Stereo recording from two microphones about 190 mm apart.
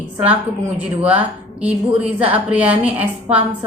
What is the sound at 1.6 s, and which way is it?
A woman's voice, 5° right (ahead or behind).